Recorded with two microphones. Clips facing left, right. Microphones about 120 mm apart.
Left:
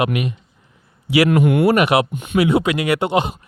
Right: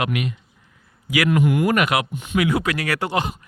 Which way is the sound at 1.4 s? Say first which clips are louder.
Left 4 dB; 70° left (ahead or behind).